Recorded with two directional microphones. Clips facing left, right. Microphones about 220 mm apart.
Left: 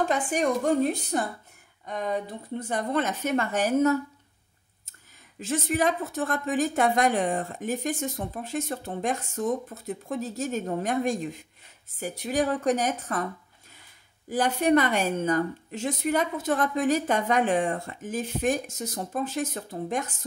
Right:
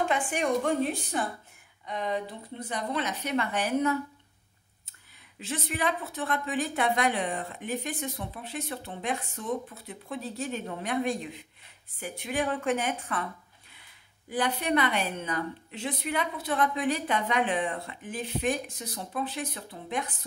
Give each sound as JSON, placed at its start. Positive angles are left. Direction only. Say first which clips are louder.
{"t": 0.1, "sound": "a woman's voice", "louder": "left 2 dB", "side_deg": 40}
{"t": 5.4, "sound": "a woman's voice", "louder": "left 6 dB", "side_deg": 45}